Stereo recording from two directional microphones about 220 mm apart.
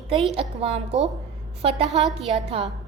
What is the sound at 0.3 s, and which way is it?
A woman's voice, 25° right (ahead or behind).